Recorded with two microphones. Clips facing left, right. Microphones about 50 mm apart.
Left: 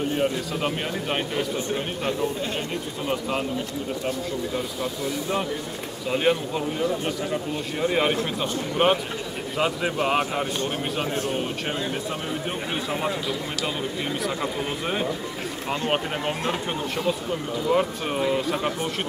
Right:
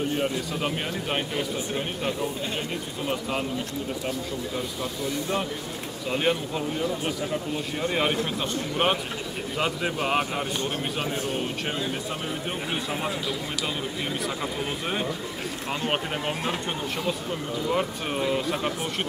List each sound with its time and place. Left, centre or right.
0.1 s speech: centre
6.0 s speech: centre
14.2 s speech: centre